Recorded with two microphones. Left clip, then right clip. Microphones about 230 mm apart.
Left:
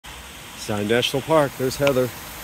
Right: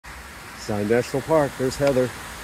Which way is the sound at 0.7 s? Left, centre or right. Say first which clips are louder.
Left 1 dB; centre.